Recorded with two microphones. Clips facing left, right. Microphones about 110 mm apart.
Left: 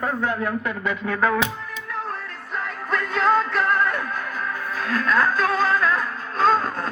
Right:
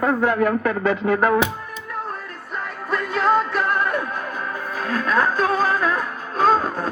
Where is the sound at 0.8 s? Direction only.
20° right (ahead or behind).